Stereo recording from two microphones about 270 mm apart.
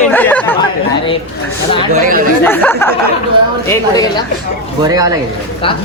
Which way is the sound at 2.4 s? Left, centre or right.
Centre.